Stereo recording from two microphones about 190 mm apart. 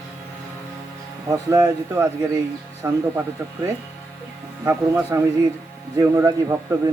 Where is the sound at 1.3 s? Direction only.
15° right (ahead or behind).